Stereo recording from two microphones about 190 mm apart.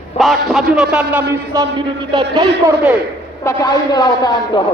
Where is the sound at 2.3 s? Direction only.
20° right (ahead or behind).